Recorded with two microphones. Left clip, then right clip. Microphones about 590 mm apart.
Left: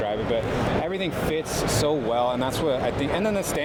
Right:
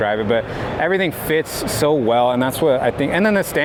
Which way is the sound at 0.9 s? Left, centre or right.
Right.